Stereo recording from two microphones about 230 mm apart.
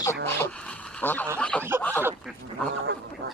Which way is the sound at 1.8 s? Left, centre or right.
Centre.